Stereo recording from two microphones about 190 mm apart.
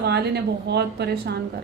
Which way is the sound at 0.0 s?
60° right (ahead or behind).